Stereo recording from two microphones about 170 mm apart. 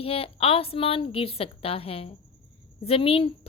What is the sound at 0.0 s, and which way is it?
A woman's voice, 35° left (ahead or behind).